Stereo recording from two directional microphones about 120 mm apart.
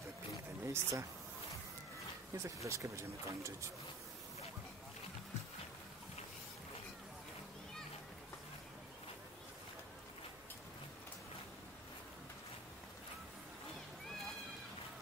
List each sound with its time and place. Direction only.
0.7 s speech: 25° right (ahead or behind)
2.3 s speech: 25° right (ahead or behind)